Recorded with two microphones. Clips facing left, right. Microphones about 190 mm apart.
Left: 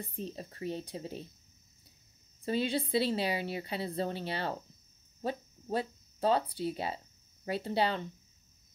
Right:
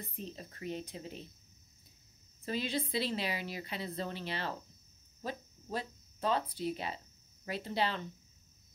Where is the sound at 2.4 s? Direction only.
30° left (ahead or behind).